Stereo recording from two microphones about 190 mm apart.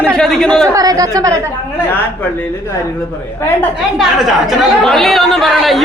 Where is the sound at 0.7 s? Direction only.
20° right (ahead or behind).